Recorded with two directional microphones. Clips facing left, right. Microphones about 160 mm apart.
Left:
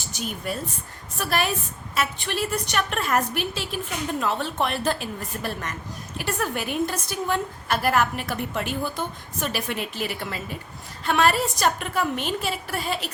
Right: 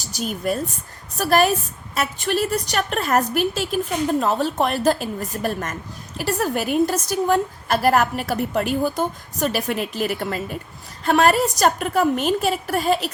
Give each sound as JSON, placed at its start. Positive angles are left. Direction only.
{"t": 0.0, "sound": "a woman's voice", "side_deg": -40}